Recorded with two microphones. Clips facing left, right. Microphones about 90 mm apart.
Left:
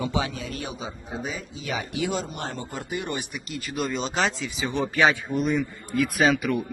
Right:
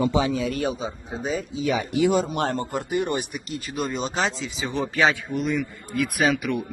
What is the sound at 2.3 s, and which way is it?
Speech, 65° right (ahead or behind).